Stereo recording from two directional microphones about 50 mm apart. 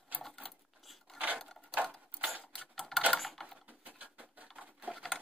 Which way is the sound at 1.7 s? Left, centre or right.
Right.